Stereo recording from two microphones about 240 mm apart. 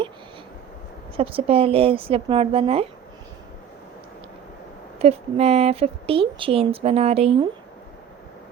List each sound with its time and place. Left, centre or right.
1.1 s speech: right
4.9 s speech: right